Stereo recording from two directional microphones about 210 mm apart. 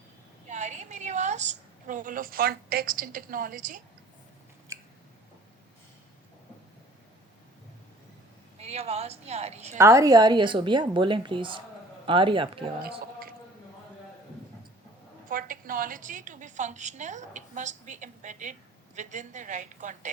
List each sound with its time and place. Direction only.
0.4 s a woman's voice: 35° right (ahead or behind)
8.5 s a woman's voice: 30° right (ahead or behind)
9.7 s a woman's voice: 15° right (ahead or behind)
15.3 s a woman's voice: 40° right (ahead or behind)